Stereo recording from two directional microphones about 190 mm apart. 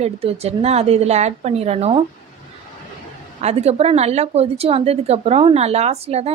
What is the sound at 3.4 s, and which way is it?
A woman's voice, 35° right (ahead or behind).